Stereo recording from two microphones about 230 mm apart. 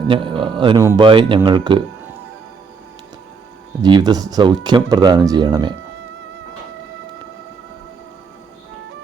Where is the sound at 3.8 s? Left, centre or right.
Centre.